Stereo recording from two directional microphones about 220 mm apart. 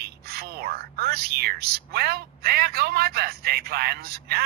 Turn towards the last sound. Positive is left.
turn(degrees=-45)  # may be behind; listen again after turning